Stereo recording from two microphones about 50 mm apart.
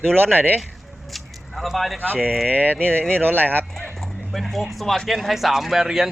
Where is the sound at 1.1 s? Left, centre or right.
Centre.